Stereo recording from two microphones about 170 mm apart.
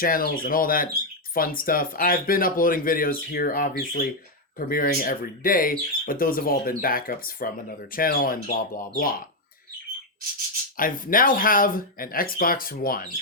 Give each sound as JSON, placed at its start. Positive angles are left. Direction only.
{"t": 0.0, "sound": "speech", "side_deg": 60}
{"t": 10.8, "sound": "speech", "side_deg": 55}